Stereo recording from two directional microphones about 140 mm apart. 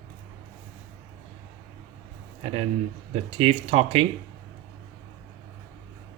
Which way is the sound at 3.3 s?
45° right (ahead or behind).